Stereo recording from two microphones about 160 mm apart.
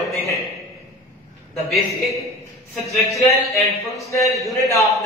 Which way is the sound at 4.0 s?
20° left (ahead or behind).